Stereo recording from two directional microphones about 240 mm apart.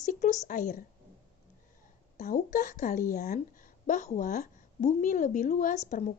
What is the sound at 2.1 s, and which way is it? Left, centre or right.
Speech, left.